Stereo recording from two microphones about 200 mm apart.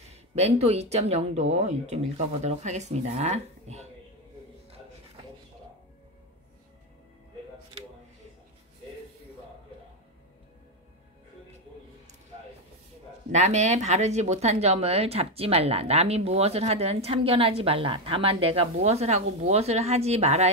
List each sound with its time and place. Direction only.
0.1 s speech: 30° right (ahead or behind)
13.3 s speech: 35° right (ahead or behind)